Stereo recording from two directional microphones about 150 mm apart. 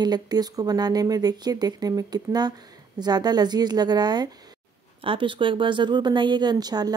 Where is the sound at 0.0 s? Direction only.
25° right (ahead or behind).